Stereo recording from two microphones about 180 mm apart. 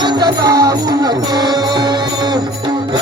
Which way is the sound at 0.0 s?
25° right (ahead or behind).